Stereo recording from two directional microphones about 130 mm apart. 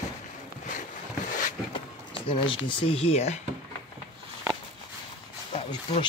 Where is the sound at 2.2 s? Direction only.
40° left (ahead or behind); by 3.4 s 55° left (ahead or behind).